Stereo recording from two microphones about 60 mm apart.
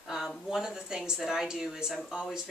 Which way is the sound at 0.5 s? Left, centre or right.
Centre.